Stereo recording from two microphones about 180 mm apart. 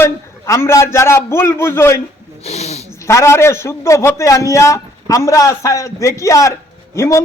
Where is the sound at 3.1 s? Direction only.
15° left (ahead or behind).